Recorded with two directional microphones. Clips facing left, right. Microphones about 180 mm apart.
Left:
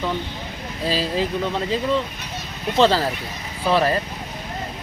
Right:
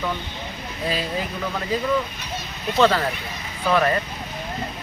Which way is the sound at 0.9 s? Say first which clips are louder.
Left 4 dB; 30° left (ahead or behind).